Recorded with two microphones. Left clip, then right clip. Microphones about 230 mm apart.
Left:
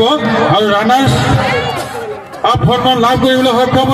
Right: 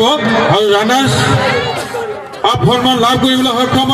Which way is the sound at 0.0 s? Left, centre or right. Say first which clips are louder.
Even; right.